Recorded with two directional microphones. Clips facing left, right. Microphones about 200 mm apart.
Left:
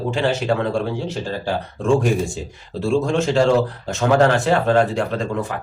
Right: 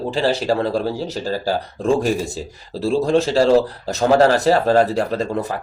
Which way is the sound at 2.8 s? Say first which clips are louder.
Right 2 dB; 35° right (ahead or behind).